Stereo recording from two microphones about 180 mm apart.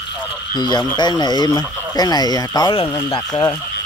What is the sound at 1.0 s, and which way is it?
Speech, 25° left (ahead or behind).